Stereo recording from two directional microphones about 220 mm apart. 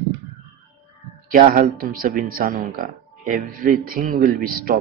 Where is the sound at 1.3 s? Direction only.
40° right (ahead or behind).